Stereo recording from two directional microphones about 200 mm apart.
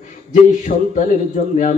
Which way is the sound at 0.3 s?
40° left (ahead or behind).